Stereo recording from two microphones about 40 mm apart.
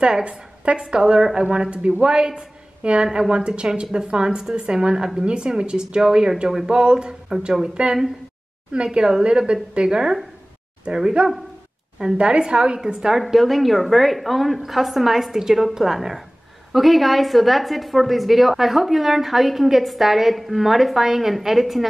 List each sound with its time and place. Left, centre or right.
0.0 s a woman's voice: right
11.2 s a woman's voice: right
13.2 s a woman's voice: centre